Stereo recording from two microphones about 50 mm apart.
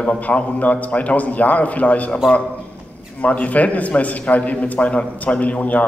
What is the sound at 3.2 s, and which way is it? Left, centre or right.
A man's voice, left.